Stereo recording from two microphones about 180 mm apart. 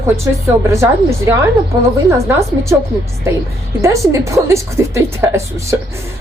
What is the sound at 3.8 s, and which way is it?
A woman's voice, 15° right (ahead or behind).